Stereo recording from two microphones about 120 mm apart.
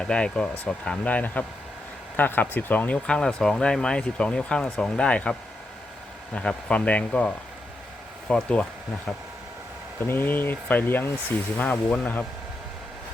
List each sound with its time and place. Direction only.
0.0 s speech: 10° left (ahead or behind)
10.1 s speech: 15° left (ahead or behind)